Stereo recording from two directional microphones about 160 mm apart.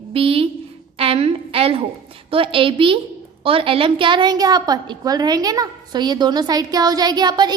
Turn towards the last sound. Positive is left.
turn(degrees=-25)  # may be behind; listen again after turning